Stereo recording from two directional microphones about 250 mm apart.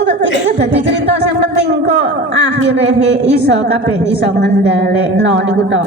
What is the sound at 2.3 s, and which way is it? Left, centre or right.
A woman's voice, right.